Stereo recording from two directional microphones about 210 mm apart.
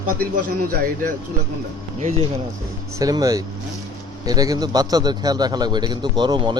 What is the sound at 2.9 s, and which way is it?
A man's voice, 15° right (ahead or behind).